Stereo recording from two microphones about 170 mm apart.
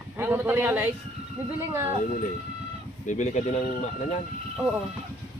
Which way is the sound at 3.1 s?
45° left (ahead or behind).